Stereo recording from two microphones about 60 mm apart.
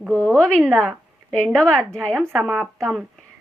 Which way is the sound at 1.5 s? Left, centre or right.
Centre.